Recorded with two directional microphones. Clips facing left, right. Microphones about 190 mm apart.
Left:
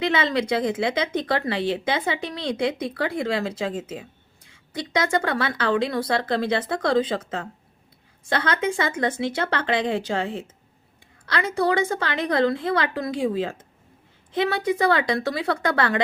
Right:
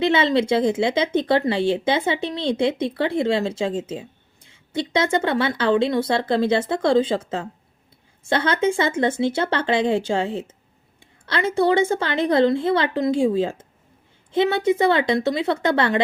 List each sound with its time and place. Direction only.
0.0 s speech: 25° right (ahead or behind)